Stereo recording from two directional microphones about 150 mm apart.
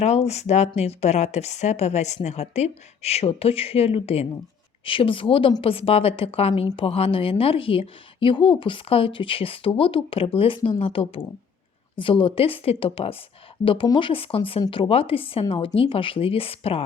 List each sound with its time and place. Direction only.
0.0 s a woman's voice: 45° left (ahead or behind)